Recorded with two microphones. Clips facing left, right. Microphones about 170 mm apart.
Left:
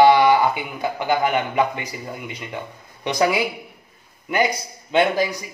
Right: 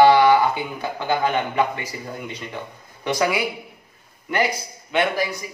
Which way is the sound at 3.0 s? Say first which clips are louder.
Left 2 dB; 20° left (ahead or behind).